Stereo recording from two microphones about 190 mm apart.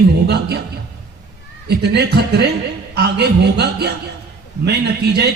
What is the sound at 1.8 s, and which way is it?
A man's voice, 60° right (ahead or behind).